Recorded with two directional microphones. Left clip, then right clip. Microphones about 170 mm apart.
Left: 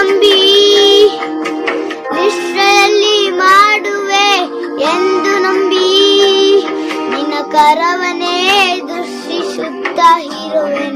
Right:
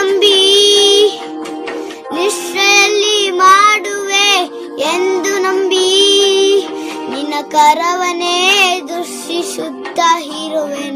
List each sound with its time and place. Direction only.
0.0 s music: 55° right (ahead or behind)
2.2 s child singing: 55° right (ahead or behind)
7.3 s music: 55° right (ahead or behind)
10.0 s music: 55° right (ahead or behind)